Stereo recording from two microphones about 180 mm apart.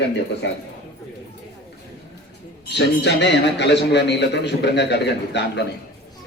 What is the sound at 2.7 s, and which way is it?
A man's voice, 70° left (ahead or behind).